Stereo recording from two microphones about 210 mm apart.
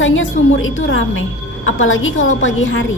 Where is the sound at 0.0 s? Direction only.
65° left (ahead or behind).